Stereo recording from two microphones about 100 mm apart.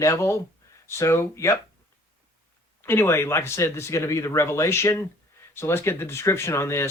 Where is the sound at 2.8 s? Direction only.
25° left (ahead or behind).